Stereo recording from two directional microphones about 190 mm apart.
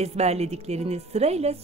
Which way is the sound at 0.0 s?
35° right (ahead or behind).